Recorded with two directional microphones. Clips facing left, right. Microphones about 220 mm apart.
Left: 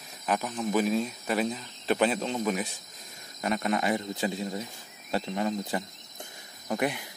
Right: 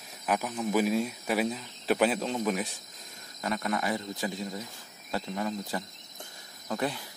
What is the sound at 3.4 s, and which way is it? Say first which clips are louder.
Speech: left 3 dB; 20° left (ahead or behind).